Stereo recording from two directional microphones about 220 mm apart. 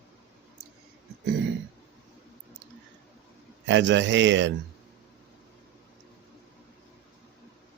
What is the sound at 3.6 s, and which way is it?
Speech, 55° right (ahead or behind).